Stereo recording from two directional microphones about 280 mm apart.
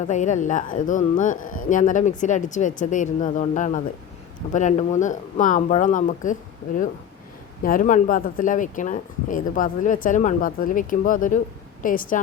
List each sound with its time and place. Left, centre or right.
0.0 s speech: left
7.6 s speech: left